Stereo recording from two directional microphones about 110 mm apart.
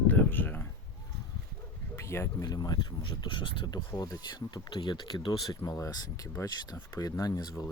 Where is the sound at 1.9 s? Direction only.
25° left (ahead or behind); by 3.8 s 50° left (ahead or behind).